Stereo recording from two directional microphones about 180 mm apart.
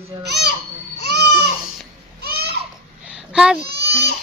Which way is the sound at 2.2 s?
65° right (ahead or behind).